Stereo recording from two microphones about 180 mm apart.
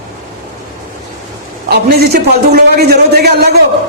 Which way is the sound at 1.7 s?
60° right (ahead or behind).